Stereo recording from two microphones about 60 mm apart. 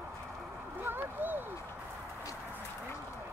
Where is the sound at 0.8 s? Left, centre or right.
Right.